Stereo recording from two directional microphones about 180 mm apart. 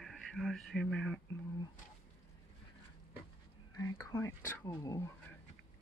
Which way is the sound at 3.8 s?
15° left (ahead or behind).